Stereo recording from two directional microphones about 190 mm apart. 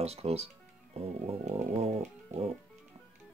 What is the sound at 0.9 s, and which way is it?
Music, 30° right (ahead or behind).